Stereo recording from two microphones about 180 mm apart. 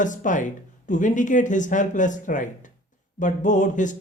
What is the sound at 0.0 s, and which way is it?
Speech, 45° left (ahead or behind).